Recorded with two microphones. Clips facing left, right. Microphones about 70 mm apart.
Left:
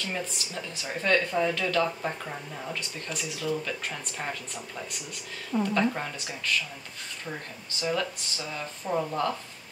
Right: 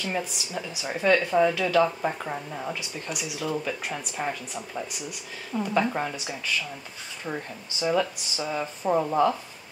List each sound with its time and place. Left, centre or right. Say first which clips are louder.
0.0 s speech: right 3 dB; centre
7.8 s speech: right 5 dB; centre